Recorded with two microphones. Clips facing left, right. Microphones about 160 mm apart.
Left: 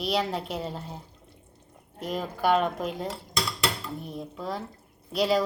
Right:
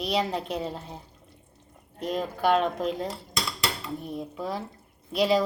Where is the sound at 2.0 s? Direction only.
5° left (ahead or behind).